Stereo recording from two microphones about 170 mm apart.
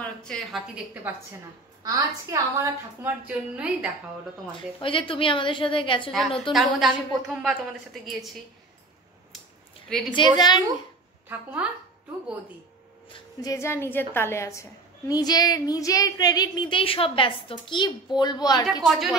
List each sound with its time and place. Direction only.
0.0 s a woman's voice: 5° left (ahead or behind)
1.1 s a woman's voice: 10° right (ahead or behind)
4.5 s a woman's voice: 30° left (ahead or behind)
6.5 s a woman's voice: 5° right (ahead or behind)
10.1 s a woman's voice: 25° left (ahead or behind)
11.2 s a woman's voice: 10° right (ahead or behind)
13.1 s a woman's voice: 20° left (ahead or behind)
18.9 s a woman's voice: centre (ahead or behind)